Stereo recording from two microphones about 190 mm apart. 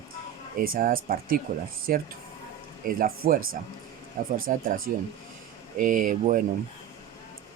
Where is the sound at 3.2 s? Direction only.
55° right (ahead or behind).